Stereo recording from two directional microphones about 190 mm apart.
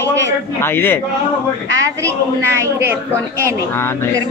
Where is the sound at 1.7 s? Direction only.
15° right (ahead or behind).